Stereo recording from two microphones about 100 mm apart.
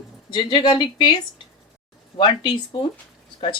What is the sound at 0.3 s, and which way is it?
Speech, 50° left (ahead or behind).